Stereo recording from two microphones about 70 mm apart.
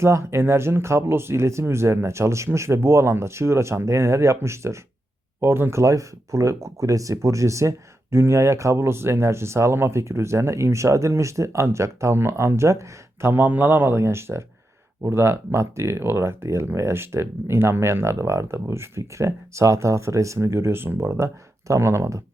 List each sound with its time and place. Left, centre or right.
0.0 s speech: right
5.8 s speech: right
13.3 s speech: right